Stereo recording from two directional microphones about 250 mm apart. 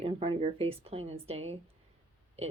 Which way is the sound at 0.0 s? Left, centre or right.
Right.